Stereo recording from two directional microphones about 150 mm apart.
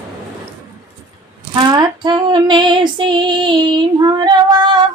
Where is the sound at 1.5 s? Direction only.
30° right (ahead or behind).